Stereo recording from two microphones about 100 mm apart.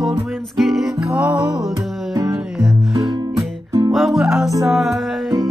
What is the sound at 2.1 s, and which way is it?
Music, 35° right (ahead or behind).